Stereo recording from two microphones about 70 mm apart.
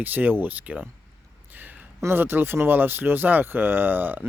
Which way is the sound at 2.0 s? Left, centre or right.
Right.